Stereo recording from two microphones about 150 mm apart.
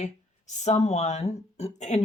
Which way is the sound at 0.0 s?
55° left (ahead or behind).